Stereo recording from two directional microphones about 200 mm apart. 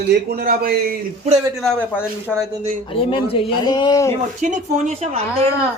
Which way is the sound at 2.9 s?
25° left (ahead or behind).